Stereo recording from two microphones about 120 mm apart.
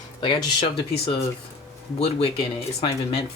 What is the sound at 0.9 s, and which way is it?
Speech, 55° left (ahead or behind).